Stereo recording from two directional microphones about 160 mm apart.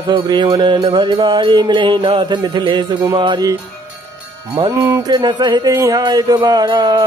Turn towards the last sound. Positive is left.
turn(degrees=-30)  # may be behind; listen again after turning